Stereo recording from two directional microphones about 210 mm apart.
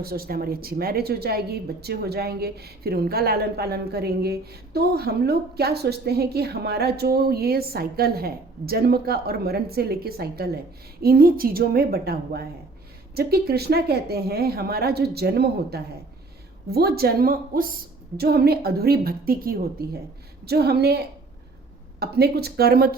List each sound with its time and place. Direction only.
0.0 s a woman's voice: 45° right (ahead or behind)
22.0 s a woman's voice: 50° right (ahead or behind)